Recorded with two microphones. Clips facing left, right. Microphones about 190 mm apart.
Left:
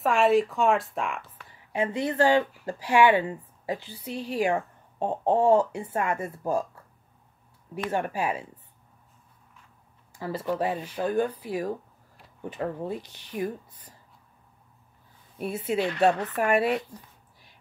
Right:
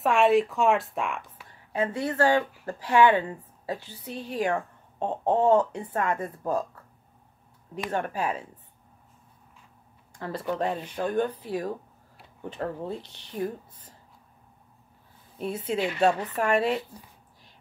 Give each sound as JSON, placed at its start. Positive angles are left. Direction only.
{"t": 0.0, "sound": "a woman's voice", "side_deg": 0}
{"t": 1.7, "sound": "a woman's voice", "side_deg": 15}
{"t": 7.9, "sound": "a woman's voice", "side_deg": 10}
{"t": 10.1, "sound": "a woman's voice", "side_deg": 5}
{"t": 15.3, "sound": "a woman's voice", "side_deg": 10}